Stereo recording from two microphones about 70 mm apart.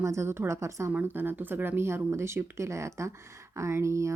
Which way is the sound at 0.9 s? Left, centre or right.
Right.